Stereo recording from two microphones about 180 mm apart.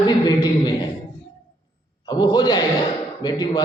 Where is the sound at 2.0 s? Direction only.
20° left (ahead or behind).